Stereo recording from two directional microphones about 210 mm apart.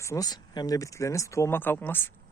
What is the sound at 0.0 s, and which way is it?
Speech, 15° left (ahead or behind).